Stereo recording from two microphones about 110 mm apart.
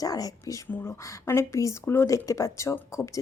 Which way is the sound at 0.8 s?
25° left (ahead or behind).